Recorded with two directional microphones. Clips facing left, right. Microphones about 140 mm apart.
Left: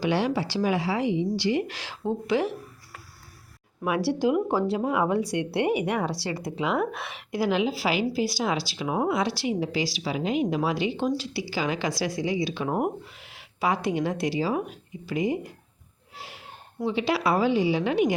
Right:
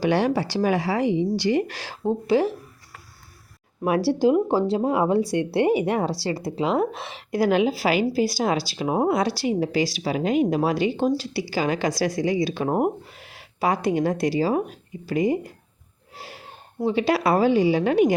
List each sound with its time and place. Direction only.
0.0 s speech: 45° right (ahead or behind)
3.8 s speech: 35° right (ahead or behind)
7.3 s speech: 50° right (ahead or behind)
16.1 s snort: 40° right (ahead or behind)
16.8 s speech: 45° right (ahead or behind)